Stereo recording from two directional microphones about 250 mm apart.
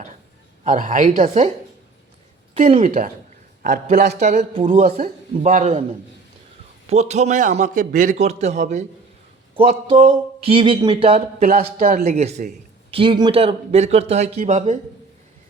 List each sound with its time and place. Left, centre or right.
0.6 s a woman's voice: right
2.6 s speech: right
6.9 s speech: right
9.6 s speech: centre